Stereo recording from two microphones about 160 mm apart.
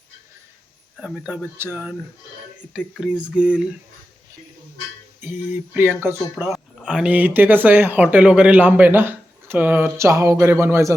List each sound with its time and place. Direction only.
0.9 s speech: 5° right (ahead or behind)
2.7 s a sound: 5° right (ahead or behind)
5.2 s speech: 10° right (ahead or behind)